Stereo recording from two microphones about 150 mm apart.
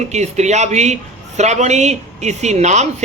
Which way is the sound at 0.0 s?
50° right (ahead or behind).